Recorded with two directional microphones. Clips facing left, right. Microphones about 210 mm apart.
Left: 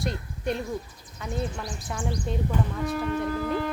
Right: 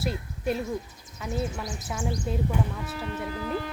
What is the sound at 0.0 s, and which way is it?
A woman's voice, 5° right (ahead or behind).